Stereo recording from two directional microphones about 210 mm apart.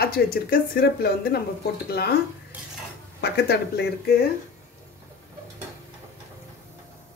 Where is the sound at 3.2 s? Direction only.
50° left (ahead or behind).